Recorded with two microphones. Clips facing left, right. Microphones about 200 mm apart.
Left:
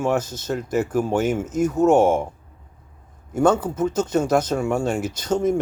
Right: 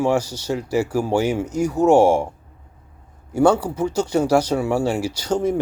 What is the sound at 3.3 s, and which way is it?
Speech, 10° right (ahead or behind).